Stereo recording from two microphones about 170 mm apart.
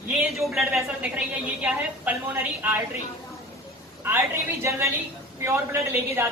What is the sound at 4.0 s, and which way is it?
A woman's voice, 15° right (ahead or behind).